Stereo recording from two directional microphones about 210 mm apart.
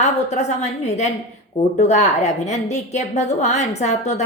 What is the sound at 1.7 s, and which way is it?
A woman's voice, 30° left (ahead or behind).